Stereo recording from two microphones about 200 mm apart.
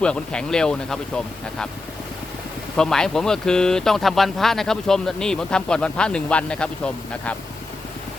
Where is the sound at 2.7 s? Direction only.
5° left (ahead or behind).